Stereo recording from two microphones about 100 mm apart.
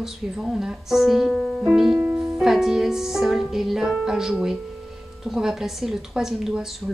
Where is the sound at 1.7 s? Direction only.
5° right (ahead or behind).